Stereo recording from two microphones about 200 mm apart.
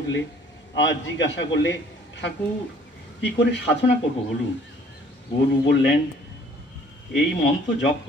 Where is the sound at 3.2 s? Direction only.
60° left (ahead or behind).